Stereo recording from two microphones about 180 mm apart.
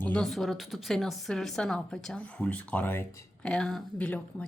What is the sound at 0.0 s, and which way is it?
A woman's voice, 5° left (ahead or behind).